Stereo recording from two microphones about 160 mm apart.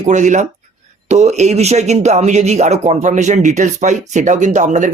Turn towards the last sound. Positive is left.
turn(degrees=-50)  # may be behind; listen again after turning